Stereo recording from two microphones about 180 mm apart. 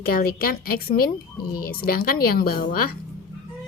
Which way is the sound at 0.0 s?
55° left (ahead or behind).